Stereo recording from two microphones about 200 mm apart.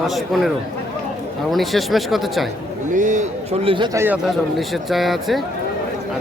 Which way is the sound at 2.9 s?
40° right (ahead or behind).